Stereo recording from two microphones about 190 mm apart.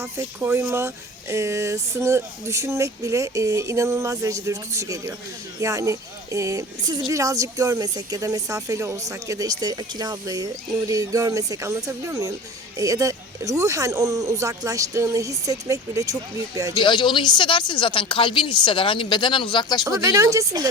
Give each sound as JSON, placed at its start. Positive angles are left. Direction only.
{"t": 0.0, "sound": "speech", "side_deg": -15}
{"t": 16.7, "sound": "speech", "side_deg": 25}
{"t": 20.0, "sound": "speech", "side_deg": -15}